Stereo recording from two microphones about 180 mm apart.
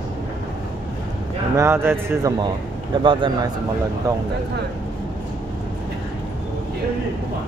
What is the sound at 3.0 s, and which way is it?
Speech, 25° right (ahead or behind).